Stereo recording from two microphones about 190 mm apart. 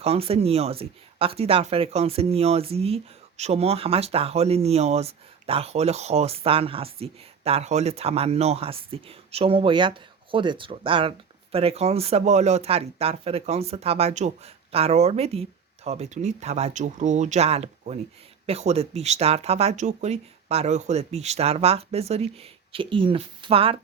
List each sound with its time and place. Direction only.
0.0 s speech: 30° right (ahead or behind)